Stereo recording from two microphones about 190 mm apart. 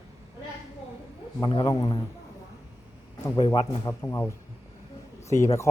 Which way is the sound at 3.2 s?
15° left (ahead or behind).